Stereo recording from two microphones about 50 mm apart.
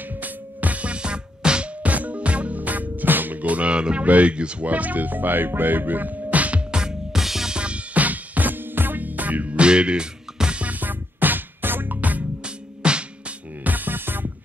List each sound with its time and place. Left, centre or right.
0.2 s music: right
6.7 s music: centre
7.5 s music: right
10.7 s music: right
12.4 s music: centre
13.7 s music: right